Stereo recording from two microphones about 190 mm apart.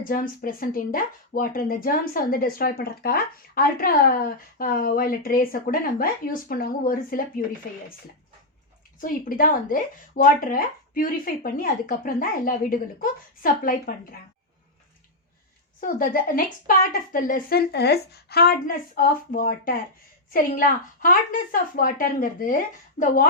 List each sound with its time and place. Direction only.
0.0 s speech: 45° left (ahead or behind)
9.0 s speech: 45° left (ahead or behind)
15.8 s speech: 45° left (ahead or behind)